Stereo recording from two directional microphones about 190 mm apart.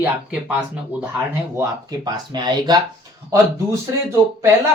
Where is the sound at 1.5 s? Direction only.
20° right (ahead or behind).